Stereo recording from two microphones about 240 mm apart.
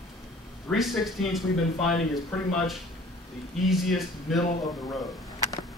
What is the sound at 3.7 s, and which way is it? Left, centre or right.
Speech, centre.